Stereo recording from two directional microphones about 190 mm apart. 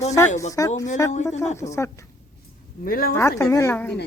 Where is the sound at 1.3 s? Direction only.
35° left (ahead or behind).